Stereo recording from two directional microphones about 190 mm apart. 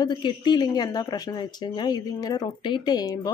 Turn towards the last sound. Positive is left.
turn(degrees=20)  # may be behind; listen again after turning